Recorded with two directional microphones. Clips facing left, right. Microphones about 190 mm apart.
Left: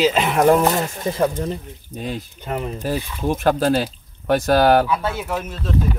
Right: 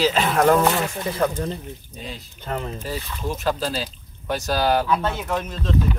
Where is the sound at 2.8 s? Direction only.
55° left (ahead or behind).